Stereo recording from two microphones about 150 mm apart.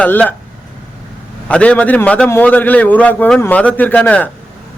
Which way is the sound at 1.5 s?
10° left (ahead or behind).